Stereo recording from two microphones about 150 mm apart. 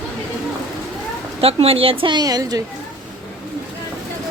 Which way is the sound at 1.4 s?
40° right (ahead or behind).